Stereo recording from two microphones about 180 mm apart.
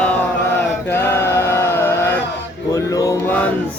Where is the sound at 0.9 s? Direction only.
15° left (ahead or behind).